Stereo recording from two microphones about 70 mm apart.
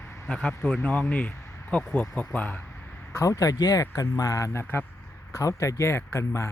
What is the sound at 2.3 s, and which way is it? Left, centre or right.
Speech, left.